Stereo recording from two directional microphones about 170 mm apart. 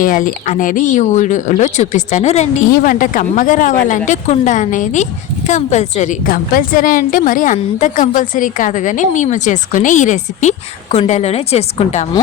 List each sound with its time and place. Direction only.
0.0 s a woman's voice: 50° left (ahead or behind)